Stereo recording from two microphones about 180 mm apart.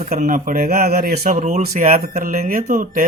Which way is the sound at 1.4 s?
40° right (ahead or behind).